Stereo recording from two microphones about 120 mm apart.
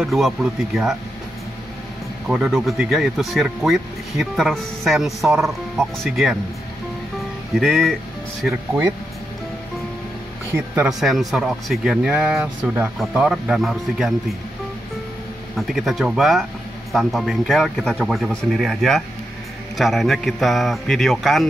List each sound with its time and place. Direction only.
0.0 s speech: centre (ahead or behind)
2.2 s speech: 5° right (ahead or behind)
7.5 s speech: centre (ahead or behind)
10.5 s speech: 15° right (ahead or behind)
10.9 s speech: centre (ahead or behind)
15.5 s speech: centre (ahead or behind)